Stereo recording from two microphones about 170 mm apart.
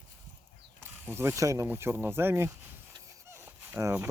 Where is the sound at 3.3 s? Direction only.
15° right (ahead or behind).